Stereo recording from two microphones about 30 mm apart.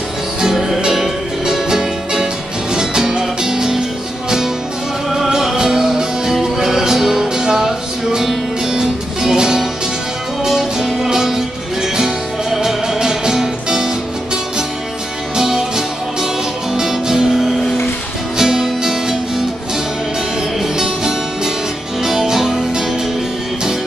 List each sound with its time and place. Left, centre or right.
0.4 s music: centre
5.3 s music: centre
10.9 s music: centre
18.4 s music: centre
20.7 s music: centre